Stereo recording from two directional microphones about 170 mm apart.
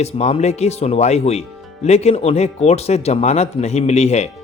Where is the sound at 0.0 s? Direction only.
40° left (ahead or behind).